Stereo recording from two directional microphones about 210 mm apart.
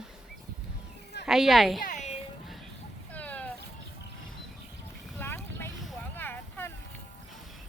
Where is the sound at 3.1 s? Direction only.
5° left (ahead or behind).